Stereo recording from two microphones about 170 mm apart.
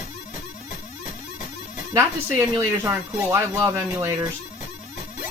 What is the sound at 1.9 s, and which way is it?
Speech, 15° right (ahead or behind).